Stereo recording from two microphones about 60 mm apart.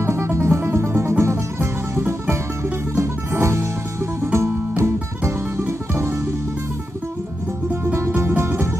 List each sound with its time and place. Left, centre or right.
0.0 s music: right
7.8 s music: right